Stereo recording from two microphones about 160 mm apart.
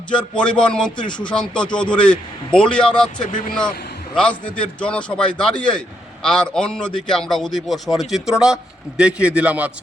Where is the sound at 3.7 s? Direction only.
75° left (ahead or behind).